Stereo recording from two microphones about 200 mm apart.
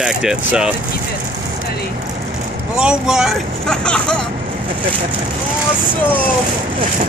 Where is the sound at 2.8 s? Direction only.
5° right (ahead or behind).